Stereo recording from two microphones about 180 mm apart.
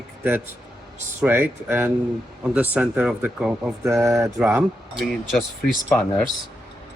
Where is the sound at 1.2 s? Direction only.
5° right (ahead or behind).